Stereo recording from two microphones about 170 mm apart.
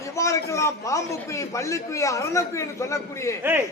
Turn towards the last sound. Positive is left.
turn(degrees=-10)  # may be behind; listen again after turning